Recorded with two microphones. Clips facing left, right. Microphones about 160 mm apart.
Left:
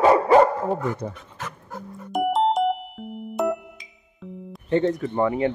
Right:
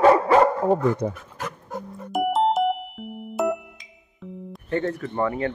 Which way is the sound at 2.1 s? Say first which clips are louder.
Even; centre (ahead or behind).